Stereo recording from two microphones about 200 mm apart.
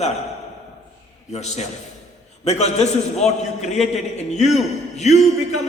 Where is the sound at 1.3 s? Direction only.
35° left (ahead or behind).